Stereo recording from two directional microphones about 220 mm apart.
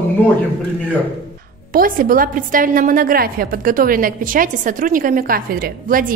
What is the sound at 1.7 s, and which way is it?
A woman's voice, 40° right (ahead or behind).